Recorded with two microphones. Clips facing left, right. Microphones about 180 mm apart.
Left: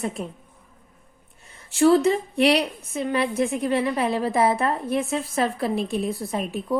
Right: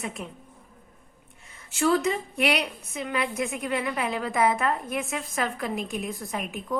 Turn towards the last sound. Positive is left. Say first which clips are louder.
# left 5 dB
turn(degrees=30)  # may be behind; listen again after turning